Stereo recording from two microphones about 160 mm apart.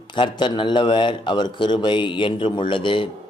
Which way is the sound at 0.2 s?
30° left (ahead or behind).